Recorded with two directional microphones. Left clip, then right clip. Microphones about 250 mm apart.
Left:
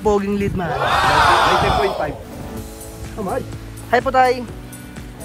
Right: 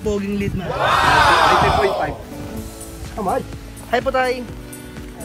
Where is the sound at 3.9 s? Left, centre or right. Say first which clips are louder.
Left 4 dB; centre.